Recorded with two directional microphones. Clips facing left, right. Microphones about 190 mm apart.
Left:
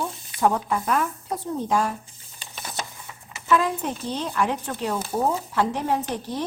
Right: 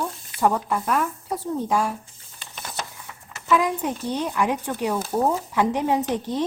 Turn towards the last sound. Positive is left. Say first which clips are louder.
# right 3 dB
turn(degrees=-20)  # may be behind; listen again after turning